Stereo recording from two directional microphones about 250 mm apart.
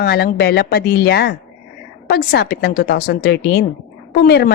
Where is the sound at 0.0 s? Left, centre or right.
Left.